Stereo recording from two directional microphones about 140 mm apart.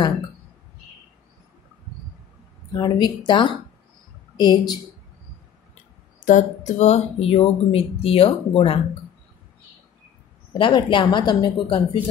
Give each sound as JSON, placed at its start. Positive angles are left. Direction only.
{"t": 2.7, "sound": "a woman's voice", "side_deg": 35}
{"t": 6.2, "sound": "speech", "side_deg": 60}
{"t": 10.6, "sound": "a woman's voice", "side_deg": 35}